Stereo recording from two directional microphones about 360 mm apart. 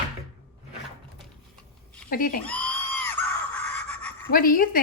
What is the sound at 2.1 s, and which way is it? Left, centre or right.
Speech, left.